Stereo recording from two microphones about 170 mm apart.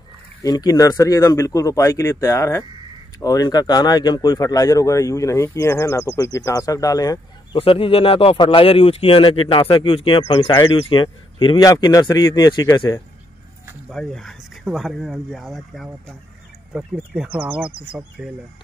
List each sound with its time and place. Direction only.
0.4 s speech: 20° left (ahead or behind)
7.5 s speech: 35° left (ahead or behind)
13.8 s speech: centre (ahead or behind)